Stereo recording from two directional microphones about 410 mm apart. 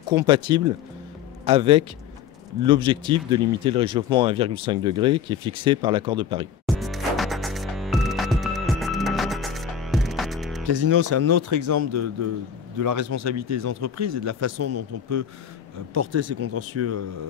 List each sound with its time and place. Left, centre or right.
0.3 s speech: centre
6.6 s music: centre
10.7 s speech: right